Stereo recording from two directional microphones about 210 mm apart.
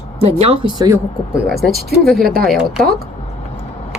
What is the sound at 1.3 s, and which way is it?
Speech, centre (ahead or behind).